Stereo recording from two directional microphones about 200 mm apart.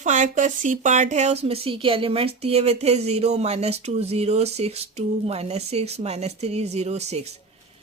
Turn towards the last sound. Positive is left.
turn(degrees=-35)  # may be behind; listen again after turning